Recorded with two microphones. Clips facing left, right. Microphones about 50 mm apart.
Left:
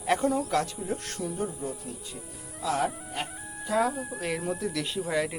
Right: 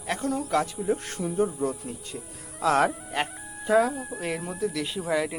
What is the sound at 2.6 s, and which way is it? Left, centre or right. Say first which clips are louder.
Speech: right 6 dB; right.